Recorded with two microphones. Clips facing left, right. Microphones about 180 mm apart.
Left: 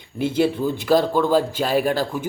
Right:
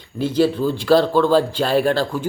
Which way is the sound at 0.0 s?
20° left (ahead or behind).